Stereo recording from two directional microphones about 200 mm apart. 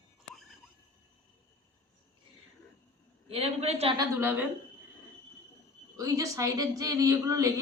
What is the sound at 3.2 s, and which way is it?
Speech, 30° right (ahead or behind).